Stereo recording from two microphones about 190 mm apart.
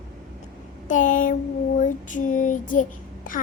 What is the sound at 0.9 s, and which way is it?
Female singing, 40° left (ahead or behind).